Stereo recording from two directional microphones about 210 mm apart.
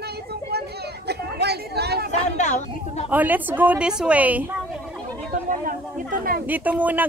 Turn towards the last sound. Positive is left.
turn(degrees=-10)  # may be behind; listen again after turning